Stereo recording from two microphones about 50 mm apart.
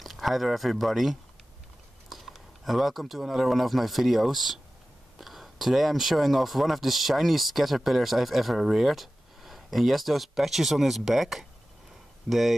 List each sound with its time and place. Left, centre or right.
0.0 s speech: centre